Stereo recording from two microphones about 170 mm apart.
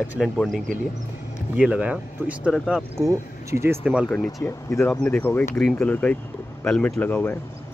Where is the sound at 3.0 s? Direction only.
15° right (ahead or behind).